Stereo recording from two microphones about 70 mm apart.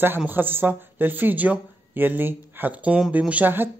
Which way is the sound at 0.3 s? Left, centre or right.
Right.